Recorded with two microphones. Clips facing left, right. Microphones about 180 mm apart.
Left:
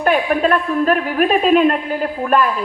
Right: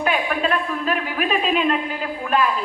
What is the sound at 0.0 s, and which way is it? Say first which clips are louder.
A man's voice: left 6 dB; 45° left (ahead or behind).